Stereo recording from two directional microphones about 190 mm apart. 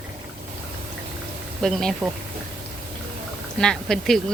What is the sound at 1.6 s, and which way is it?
Speech, centre (ahead or behind).